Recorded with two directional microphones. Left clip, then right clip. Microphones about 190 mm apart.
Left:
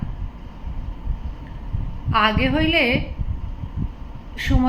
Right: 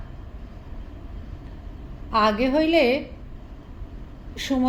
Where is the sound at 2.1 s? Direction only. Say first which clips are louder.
Left 1 dB; 40° right (ahead or behind).